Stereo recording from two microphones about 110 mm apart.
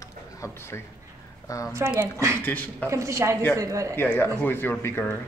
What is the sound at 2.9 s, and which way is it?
A woman's voice, 30° right (ahead or behind).